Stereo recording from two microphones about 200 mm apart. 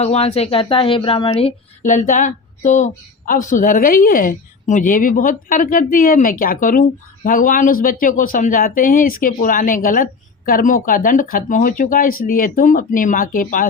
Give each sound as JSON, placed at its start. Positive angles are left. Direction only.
{"t": 0.0, "sound": "a woman's voice", "side_deg": 30}